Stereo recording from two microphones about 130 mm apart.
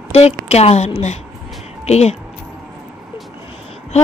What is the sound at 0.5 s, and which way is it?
A woman's voice, 55° left (ahead or behind).